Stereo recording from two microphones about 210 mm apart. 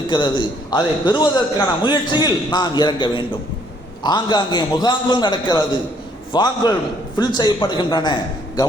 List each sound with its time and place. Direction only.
0.1 s a man's voice: 20° left (ahead or behind)